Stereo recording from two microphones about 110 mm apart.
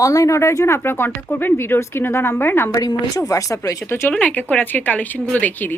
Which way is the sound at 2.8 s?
30° left (ahead or behind).